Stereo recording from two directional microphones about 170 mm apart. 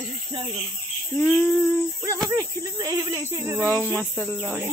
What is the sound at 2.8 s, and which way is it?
Speech, 20° right (ahead or behind).